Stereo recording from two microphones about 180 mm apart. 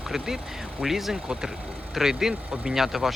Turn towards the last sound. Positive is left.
turn(degrees=0)  # may be behind; listen again after turning